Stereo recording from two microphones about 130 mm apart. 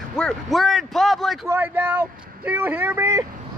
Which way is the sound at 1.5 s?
15° right (ahead or behind).